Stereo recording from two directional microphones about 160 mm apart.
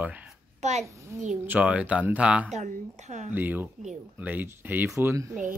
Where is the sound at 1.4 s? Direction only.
10° right (ahead or behind).